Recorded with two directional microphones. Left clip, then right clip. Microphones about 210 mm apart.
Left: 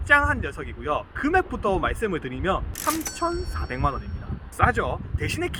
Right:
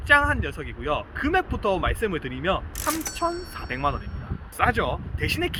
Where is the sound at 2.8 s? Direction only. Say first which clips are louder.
Left 1 dB; centre (ahead or behind).